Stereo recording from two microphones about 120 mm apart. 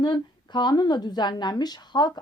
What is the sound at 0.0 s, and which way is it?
A woman's voice, 40° left (ahead or behind).